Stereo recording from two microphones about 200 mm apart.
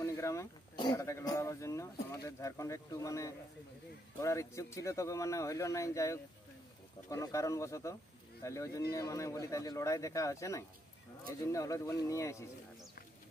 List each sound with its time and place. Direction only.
0.0 s speech: 15° left (ahead or behind)